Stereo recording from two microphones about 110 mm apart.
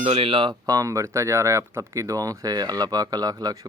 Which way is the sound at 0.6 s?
30° right (ahead or behind).